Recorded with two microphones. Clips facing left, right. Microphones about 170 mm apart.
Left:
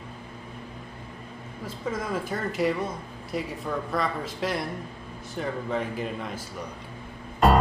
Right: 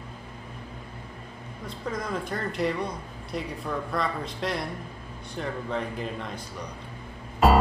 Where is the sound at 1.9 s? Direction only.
5° left (ahead or behind).